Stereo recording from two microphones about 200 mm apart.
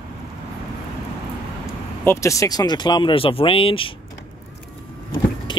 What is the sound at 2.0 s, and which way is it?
Speech, 15° left (ahead or behind).